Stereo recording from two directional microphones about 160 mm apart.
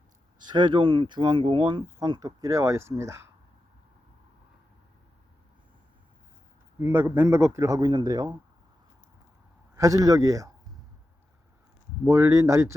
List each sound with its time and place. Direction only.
0.3 s speech: 25° right (ahead or behind)
6.7 s speech: 15° right (ahead or behind)
9.7 s speech: 20° right (ahead or behind)
12.0 s speech: 20° right (ahead or behind)